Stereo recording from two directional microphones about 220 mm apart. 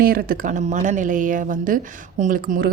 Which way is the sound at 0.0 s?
45° right (ahead or behind).